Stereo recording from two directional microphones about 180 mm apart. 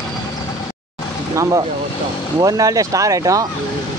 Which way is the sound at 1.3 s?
15° right (ahead or behind).